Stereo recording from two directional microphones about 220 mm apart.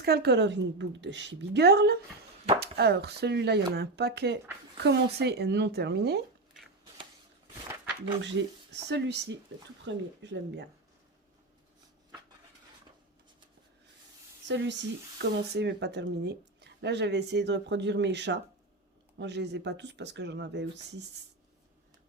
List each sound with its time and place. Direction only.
0.0 s speech: 45° right (ahead or behind)
8.2 s speech: 55° right (ahead or behind)
14.4 s speech: 55° right (ahead or behind)